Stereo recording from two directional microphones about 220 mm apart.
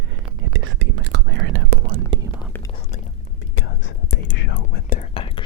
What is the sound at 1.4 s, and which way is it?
Whispering, 45° right (ahead or behind).